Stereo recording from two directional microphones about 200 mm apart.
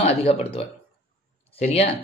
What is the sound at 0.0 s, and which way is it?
Speech, 30° left (ahead or behind).